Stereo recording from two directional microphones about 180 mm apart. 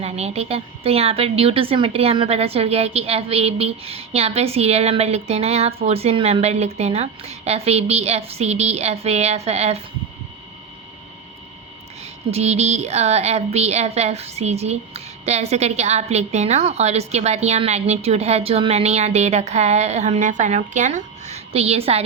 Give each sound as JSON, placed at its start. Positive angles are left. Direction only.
{"t": 0.0, "sound": "a woman's voice", "side_deg": -35}
{"t": 12.3, "sound": "a woman's voice", "side_deg": -35}